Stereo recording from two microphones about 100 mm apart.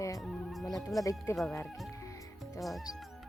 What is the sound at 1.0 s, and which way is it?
Speech, 35° left (ahead or behind).